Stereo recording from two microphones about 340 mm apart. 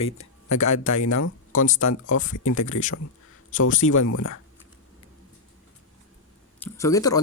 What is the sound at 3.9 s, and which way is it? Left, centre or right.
Speech, left.